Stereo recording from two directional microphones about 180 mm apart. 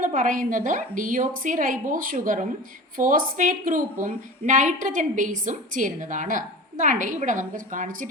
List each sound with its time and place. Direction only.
0.0 s a woman's voice: 45° right (ahead or behind)